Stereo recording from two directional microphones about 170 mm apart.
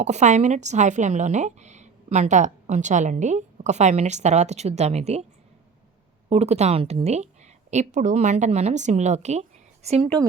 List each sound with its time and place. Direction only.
0.0 s speech: 40° right (ahead or behind)
6.2 s a woman's voice: 40° right (ahead or behind)